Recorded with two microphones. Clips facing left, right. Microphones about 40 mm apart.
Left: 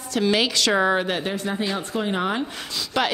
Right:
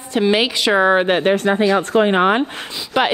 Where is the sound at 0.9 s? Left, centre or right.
Right.